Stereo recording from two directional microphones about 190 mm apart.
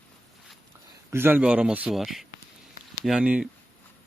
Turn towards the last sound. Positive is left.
turn(degrees=-5)  # may be behind; listen again after turning